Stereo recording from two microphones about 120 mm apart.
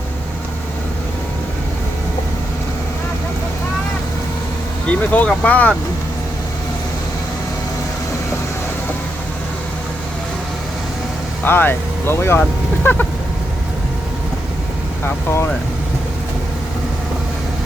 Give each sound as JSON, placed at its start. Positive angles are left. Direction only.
{"t": 4.9, "sound": "speech", "side_deg": 10}
{"t": 11.4, "sound": "speech", "side_deg": 20}
{"t": 15.0, "sound": "speech", "side_deg": 20}